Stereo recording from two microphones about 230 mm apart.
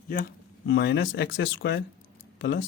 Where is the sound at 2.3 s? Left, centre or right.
Left.